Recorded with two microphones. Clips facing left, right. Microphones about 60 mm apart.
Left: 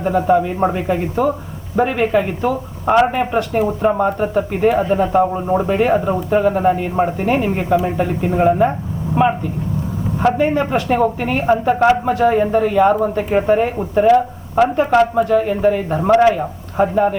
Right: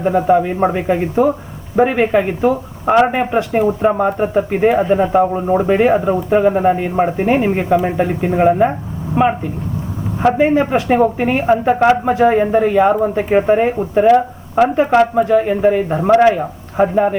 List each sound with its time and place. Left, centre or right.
0.0 s speech: centre
10.2 s a man's voice: centre